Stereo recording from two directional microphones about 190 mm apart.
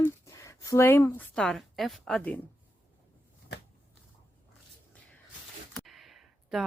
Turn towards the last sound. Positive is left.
turn(degrees=0)  # may be behind; listen again after turning